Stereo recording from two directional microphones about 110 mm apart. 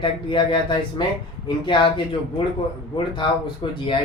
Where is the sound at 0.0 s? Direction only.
50° left (ahead or behind).